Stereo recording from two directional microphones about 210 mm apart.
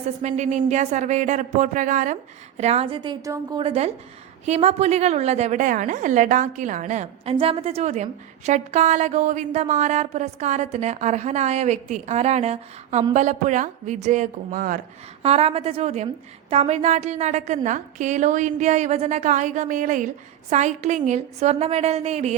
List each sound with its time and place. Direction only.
0.2 s a woman's voice: 35° right (ahead or behind); by 3.6 s 15° right (ahead or behind)
3.6 s a woman's voice: 30° right (ahead or behind)
15.2 s a woman's voice: 30° right (ahead or behind)